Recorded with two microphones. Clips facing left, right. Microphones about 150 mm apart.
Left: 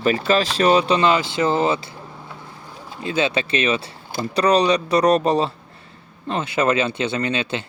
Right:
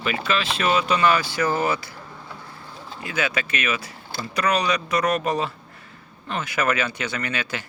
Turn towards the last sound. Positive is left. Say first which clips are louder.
# left 6 dB
turn(degrees=25)  # may be behind; listen again after turning